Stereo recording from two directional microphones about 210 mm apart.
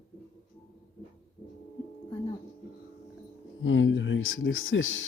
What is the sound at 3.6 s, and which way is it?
Speech, 65° left (ahead or behind).